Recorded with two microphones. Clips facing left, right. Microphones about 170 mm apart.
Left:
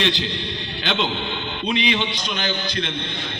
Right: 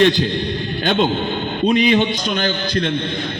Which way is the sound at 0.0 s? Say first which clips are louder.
Right 9 dB; 50° right (ahead or behind).